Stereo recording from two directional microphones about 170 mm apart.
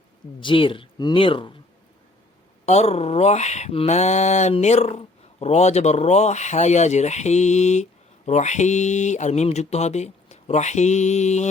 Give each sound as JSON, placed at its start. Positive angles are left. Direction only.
{"t": 0.4, "sound": "speech", "side_deg": 30}
{"t": 2.6, "sound": "speech", "side_deg": 40}